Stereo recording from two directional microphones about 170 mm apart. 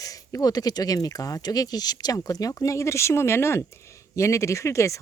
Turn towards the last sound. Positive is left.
turn(degrees=15)  # may be behind; listen again after turning